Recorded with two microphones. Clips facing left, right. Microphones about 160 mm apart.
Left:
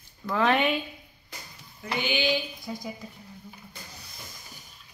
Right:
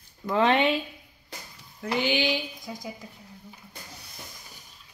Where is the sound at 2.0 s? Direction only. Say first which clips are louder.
Even; 80° right.